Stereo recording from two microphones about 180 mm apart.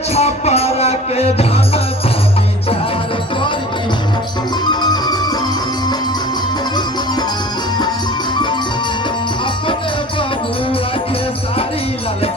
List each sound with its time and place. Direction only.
0.1 s music: 35° left (ahead or behind)
4.7 s music: 20° left (ahead or behind)